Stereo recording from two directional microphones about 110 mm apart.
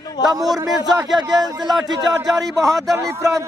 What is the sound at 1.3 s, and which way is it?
A man's voice, 35° right (ahead or behind).